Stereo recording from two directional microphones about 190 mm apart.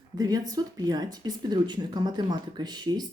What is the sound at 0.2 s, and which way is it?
Speech, 20° right (ahead or behind).